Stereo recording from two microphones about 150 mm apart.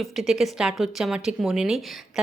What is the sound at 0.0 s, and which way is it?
A woman's voice, centre (ahead or behind).